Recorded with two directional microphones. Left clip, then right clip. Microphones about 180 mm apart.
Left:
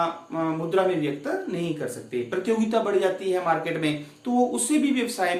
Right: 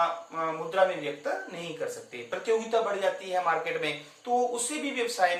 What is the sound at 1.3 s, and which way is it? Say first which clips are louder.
Speech: even; 25° left (ahead or behind).